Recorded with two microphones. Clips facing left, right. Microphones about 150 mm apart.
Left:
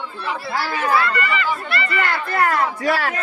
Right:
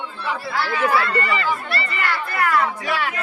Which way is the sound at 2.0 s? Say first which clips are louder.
Left 3 dB; 45° left (ahead or behind).